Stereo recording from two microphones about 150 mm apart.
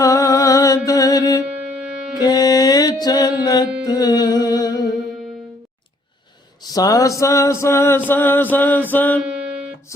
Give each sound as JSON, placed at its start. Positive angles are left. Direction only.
{"t": 0.0, "sound": "music", "side_deg": 25}
{"t": 0.9, "sound": "mantra", "side_deg": 25}
{"t": 1.8, "sound": "music", "side_deg": -10}
{"t": 2.1, "sound": "music", "side_deg": 25}
{"t": 6.7, "sound": "mantra", "side_deg": 25}